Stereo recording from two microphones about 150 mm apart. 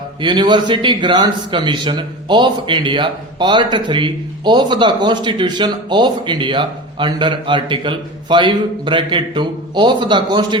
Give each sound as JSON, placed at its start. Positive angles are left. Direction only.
{"t": 0.2, "sound": "a man's voice", "side_deg": -30}